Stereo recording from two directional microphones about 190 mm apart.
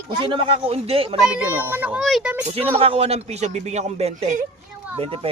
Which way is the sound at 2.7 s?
30° right (ahead or behind).